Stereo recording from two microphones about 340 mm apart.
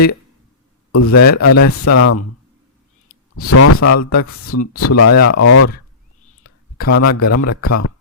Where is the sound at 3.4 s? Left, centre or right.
Left.